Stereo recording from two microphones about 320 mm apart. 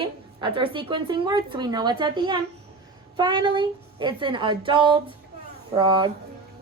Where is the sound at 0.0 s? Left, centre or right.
Centre.